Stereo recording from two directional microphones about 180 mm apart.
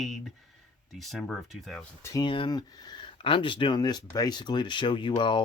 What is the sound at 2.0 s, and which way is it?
Speech, 20° left (ahead or behind).